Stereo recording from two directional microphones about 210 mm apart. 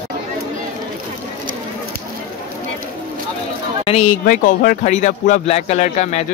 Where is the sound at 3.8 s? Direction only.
35° left (ahead or behind).